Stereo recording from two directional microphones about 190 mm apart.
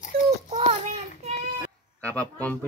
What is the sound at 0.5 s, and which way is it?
Child singing, 35° right (ahead or behind).